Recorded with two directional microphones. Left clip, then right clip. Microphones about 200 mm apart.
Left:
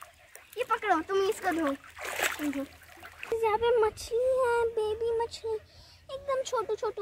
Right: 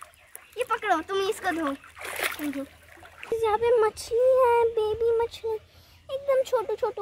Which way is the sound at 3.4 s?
50° right (ahead or behind).